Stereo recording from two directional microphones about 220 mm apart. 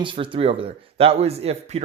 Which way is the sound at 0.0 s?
20° right (ahead or behind).